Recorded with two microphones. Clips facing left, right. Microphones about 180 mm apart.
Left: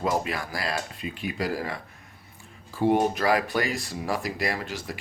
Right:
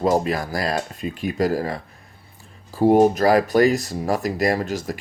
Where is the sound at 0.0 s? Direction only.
40° right (ahead or behind).